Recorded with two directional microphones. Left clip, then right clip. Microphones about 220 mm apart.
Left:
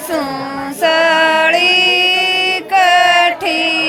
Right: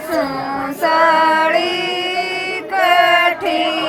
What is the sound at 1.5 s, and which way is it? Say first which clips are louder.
Chant: left 6 dB; 50° left (ahead or behind).